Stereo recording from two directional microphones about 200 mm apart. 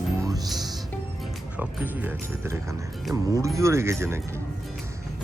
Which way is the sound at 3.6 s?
15° right (ahead or behind).